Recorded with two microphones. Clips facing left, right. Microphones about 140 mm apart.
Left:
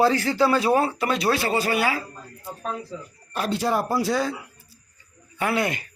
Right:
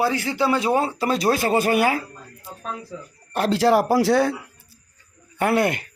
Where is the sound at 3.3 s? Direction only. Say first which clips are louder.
Right 6 dB; 75° right (ahead or behind).